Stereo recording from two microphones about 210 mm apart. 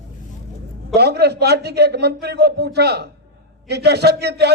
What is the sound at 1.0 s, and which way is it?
A man's voice, 50° right (ahead or behind).